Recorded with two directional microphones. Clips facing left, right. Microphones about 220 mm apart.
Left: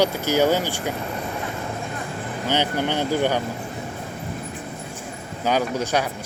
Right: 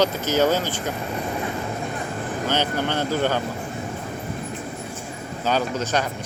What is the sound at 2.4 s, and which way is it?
Speech, 15° left (ahead or behind).